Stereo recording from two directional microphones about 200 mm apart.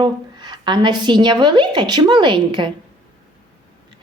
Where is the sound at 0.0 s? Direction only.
20° right (ahead or behind).